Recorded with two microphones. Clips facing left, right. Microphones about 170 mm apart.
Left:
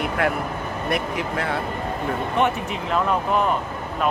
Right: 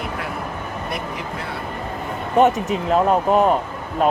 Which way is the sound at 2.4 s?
40° right (ahead or behind).